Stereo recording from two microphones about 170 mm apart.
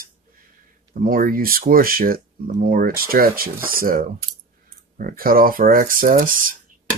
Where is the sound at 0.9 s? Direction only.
55° right (ahead or behind).